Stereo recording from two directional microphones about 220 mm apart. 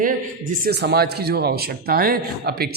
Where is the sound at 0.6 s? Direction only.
50° right (ahead or behind).